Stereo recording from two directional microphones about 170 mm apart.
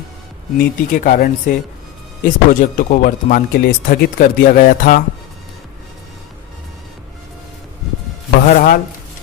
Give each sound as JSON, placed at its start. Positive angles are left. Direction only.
{"t": 0.6, "sound": "speech", "side_deg": 55}
{"t": 8.4, "sound": "speech", "side_deg": 50}